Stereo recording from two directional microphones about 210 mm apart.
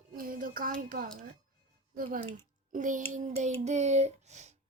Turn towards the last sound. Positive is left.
turn(degrees=-35)  # may be behind; listen again after turning